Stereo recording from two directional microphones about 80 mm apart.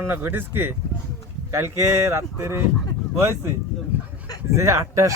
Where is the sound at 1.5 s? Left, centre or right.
Right.